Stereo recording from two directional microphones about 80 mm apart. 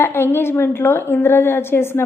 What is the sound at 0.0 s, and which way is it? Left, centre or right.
A woman's voice, left.